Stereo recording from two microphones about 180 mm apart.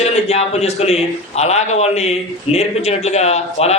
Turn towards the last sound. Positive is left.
turn(degrees=35)  # may be behind; listen again after turning